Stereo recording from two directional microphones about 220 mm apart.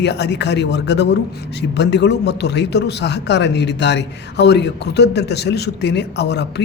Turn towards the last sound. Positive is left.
turn(degrees=50)  # may be behind; listen again after turning